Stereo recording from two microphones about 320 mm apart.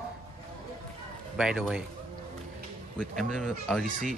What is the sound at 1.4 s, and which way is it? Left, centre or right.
Speech, centre.